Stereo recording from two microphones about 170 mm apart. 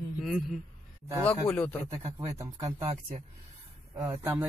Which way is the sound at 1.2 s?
10° left (ahead or behind).